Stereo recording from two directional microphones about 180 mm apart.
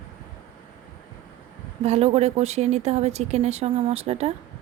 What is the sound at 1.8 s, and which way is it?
A woman's voice, 35° right (ahead or behind).